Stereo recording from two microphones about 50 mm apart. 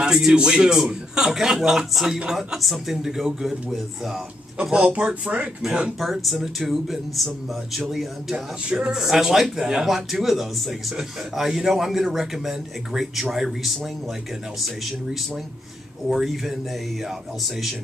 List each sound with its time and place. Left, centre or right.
0.0 s a man's voice: centre
4.6 s speech: centre
5.9 s speech: centre
8.6 s speech: right
8.9 s speech: centre
16.1 s speech: centre